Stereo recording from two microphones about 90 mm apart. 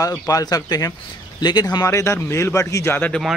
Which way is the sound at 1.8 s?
30° left (ahead or behind).